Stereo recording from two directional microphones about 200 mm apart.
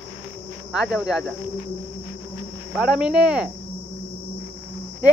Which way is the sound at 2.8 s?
5° right (ahead or behind).